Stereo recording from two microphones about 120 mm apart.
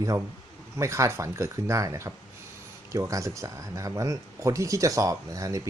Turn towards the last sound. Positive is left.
turn(degrees=-25)  # may be behind; listen again after turning